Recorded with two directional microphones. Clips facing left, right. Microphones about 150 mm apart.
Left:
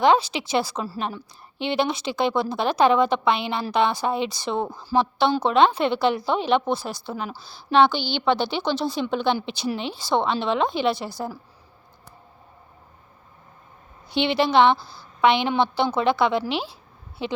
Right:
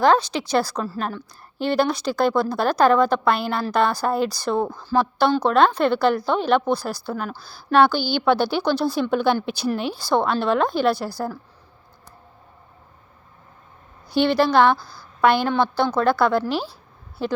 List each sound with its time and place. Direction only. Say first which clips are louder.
0.0 s a woman's voice: right 1 dB; 5° left (ahead or behind)
4.7 s a woman's voice: right 1 dB; 10° left (ahead or behind)
14.1 s a woman's voice: right 3 dB; centre (ahead or behind)
14.8 s a woman's voice: right 1 dB; 25° left (ahead or behind)
15.2 s a woman's voice: right 1 dB; 5° right (ahead or behind)